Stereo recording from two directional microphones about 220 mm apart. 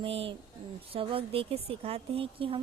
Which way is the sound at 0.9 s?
25° right (ahead or behind).